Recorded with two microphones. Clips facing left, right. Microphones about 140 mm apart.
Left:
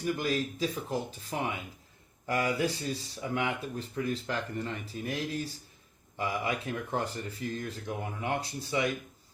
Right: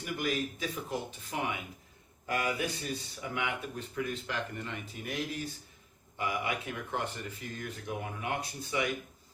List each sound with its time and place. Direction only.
0.0 s speech: 35° left (ahead or behind)